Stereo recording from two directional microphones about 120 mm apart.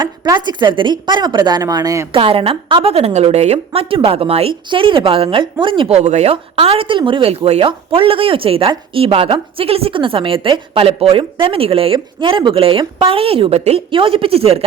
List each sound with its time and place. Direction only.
0.0 s a woman's voice: 35° right (ahead or behind)
2.1 s a woman's voice: 50° right (ahead or behind)
5.9 s speech: 65° right (ahead or behind)
6.3 s a woman's voice: 50° right (ahead or behind)
13.9 s a woman's voice: 50° right (ahead or behind)